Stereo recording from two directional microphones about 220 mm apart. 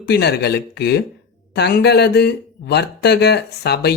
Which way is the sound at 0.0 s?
50° left (ahead or behind).